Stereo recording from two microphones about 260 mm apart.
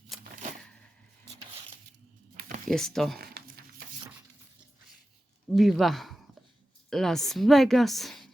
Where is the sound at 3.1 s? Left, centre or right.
Right.